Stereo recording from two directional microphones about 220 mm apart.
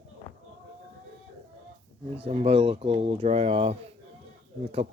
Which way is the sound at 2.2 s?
25° right (ahead or behind).